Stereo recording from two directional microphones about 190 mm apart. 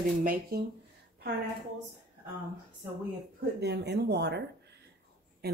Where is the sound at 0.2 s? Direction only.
50° right (ahead or behind).